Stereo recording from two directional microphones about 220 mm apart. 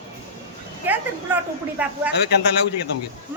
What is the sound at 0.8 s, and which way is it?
A woman's voice, 10° right (ahead or behind).